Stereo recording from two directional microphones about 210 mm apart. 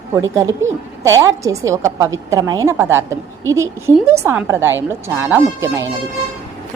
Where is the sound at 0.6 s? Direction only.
15° right (ahead or behind).